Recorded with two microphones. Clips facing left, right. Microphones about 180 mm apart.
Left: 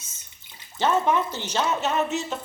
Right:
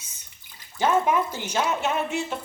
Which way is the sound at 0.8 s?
10° right (ahead or behind).